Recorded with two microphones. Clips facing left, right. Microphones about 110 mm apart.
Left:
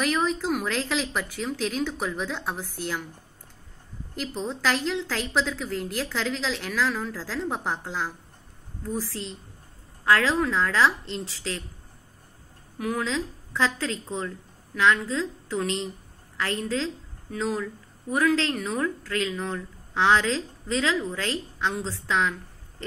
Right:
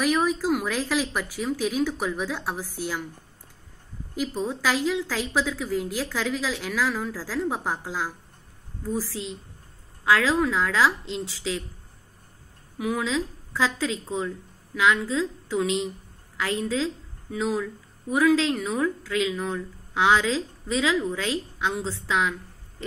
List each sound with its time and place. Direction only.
0.0 s speech: 5° right (ahead or behind)
4.4 s a woman's voice: 10° right (ahead or behind)
12.7 s a woman's voice: 5° right (ahead or behind)